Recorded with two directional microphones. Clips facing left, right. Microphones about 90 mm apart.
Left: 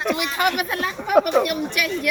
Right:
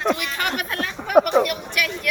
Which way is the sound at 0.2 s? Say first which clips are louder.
Left 4 dB; 15° left (ahead or behind).